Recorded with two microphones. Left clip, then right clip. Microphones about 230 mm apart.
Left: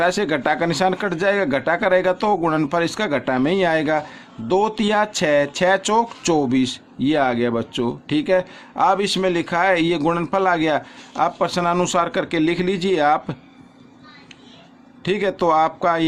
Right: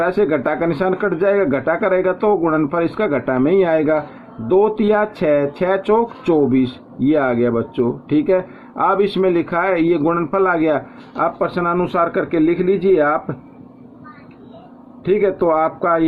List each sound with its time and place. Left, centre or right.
0.0 s speech: left
15.0 s speech: left